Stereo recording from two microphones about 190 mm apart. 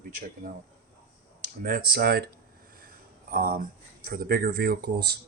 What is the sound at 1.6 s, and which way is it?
Speech, 50° right (ahead or behind).